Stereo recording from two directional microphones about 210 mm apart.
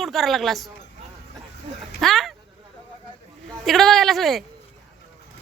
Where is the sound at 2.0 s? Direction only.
Centre (ahead or behind).